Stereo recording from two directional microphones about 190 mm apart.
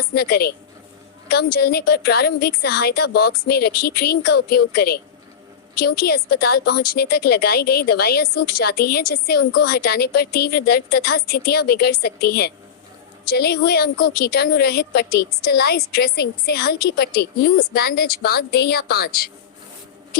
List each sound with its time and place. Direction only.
0.1 s a woman's voice: 55° left (ahead or behind)